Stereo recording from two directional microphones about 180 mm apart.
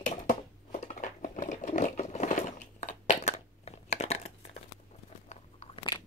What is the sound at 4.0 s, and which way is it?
Crumpling, 35° left (ahead or behind).